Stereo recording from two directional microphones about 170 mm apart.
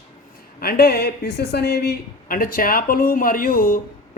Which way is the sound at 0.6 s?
60° left (ahead or behind).